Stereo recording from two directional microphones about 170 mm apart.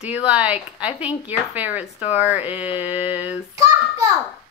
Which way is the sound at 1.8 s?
40° left (ahead or behind).